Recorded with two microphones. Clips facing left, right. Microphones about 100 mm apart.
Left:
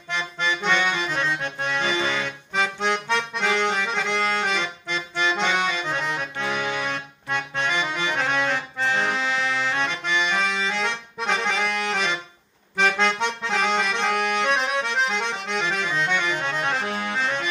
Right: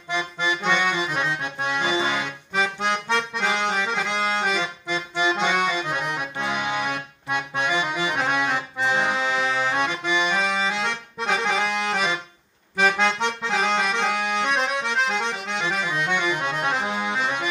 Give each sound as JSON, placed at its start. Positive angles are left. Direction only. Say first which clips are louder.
{"t": 0.1, "sound": "accordion", "louder": "right 1 dB", "side_deg": -10}
{"t": 11.6, "sound": "accordion", "louder": "right 1 dB", "side_deg": -15}
{"t": 11.9, "sound": "accordion", "louder": "right 1 dB", "side_deg": -5}